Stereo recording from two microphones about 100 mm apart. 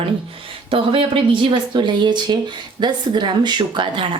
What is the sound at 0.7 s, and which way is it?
Speech, 65° right (ahead or behind).